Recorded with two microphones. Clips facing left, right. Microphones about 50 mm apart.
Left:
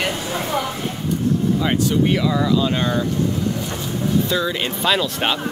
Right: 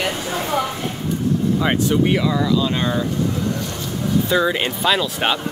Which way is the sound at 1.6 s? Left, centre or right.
Centre.